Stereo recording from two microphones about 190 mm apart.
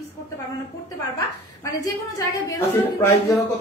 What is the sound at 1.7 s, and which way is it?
A woman's voice, 20° left (ahead or behind).